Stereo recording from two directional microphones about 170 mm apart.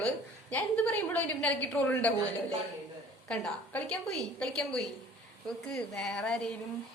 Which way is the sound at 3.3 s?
5° left (ahead or behind).